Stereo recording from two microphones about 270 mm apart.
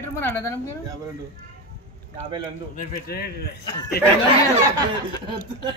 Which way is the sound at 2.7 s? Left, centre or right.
Left.